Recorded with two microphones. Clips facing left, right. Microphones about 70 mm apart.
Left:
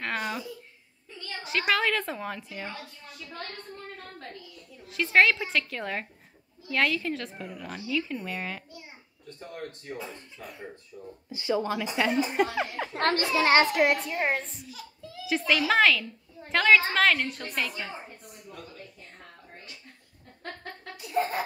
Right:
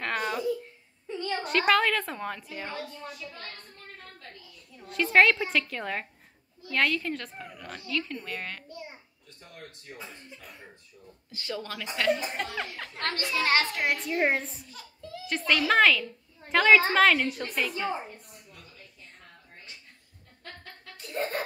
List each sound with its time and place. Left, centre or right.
0.0 s a sound: centre
1.4 s speech: centre
4.8 s speech: centre
9.4 s speech: left
11.3 s a woman's voice: centre
12.9 s a woman's voice: left
14.1 s a child's voice: centre
14.7 s a child's voice: centre
21.0 s giggle: centre